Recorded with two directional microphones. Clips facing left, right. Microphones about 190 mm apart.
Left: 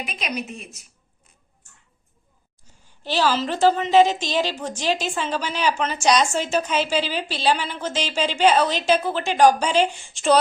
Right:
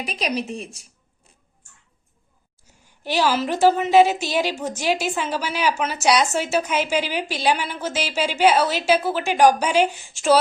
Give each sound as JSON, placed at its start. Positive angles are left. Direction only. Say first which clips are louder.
{"t": 0.0, "sound": "a woman's voice", "louder": "right 4 dB", "side_deg": -35}
{"t": 2.6, "sound": "a woman's voice", "louder": "right 1 dB", "side_deg": -10}